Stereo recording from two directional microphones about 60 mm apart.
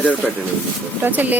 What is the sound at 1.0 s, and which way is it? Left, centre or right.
Speech, right.